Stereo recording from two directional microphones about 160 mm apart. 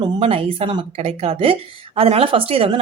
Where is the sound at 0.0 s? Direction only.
35° right (ahead or behind).